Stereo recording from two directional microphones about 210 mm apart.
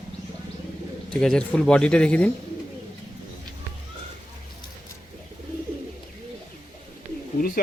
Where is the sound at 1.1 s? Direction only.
5° left (ahead or behind).